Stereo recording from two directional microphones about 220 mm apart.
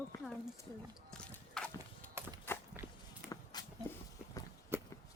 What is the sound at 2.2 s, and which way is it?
Walk, 10° right (ahead or behind).